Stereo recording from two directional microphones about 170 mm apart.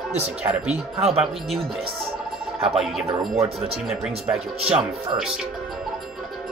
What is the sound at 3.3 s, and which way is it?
Speech, 35° right (ahead or behind).